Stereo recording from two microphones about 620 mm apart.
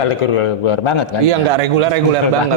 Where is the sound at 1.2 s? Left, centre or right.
Right.